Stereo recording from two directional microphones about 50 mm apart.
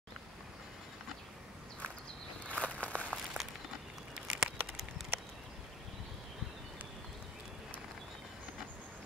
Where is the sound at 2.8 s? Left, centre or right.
Left.